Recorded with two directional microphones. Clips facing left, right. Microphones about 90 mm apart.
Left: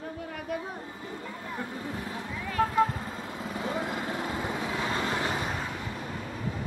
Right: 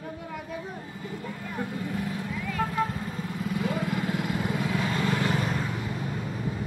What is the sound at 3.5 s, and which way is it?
Vehicle, 25° left (ahead or behind).